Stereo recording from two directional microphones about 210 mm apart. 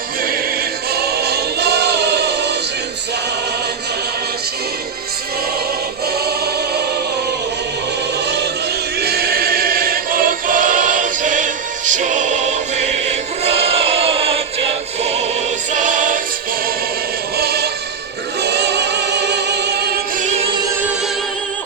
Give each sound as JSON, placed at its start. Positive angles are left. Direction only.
{"t": 0.9, "sound": "music", "side_deg": -50}
{"t": 9.0, "sound": "choir", "side_deg": -50}
{"t": 15.0, "sound": "music", "side_deg": -30}
{"t": 17.3, "sound": "music", "side_deg": -50}